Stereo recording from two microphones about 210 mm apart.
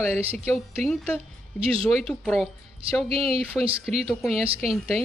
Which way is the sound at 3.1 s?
25° right (ahead or behind).